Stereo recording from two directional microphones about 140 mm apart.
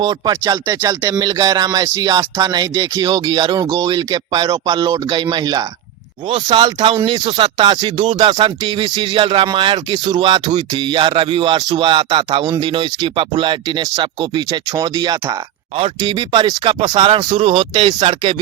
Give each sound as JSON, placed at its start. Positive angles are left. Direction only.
{"t": 0.0, "sound": "speech", "side_deg": -30}